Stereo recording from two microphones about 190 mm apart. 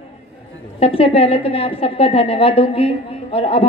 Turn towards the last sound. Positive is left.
turn(degrees=30)  # may be behind; listen again after turning